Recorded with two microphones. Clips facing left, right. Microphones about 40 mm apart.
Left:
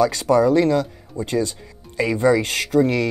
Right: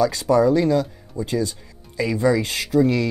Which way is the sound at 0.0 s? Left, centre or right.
Left.